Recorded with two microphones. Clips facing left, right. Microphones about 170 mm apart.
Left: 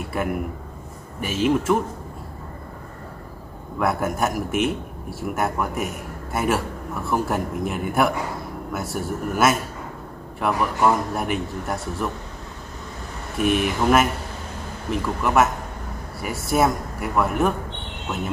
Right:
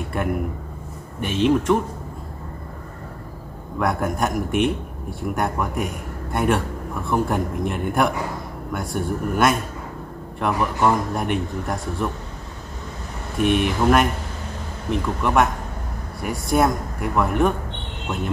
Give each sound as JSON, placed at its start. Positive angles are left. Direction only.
{"t": 0.1, "sound": "a man's voice", "side_deg": 5}
{"t": 3.8, "sound": "a man's voice", "side_deg": 5}
{"t": 13.4, "sound": "a man's voice", "side_deg": 0}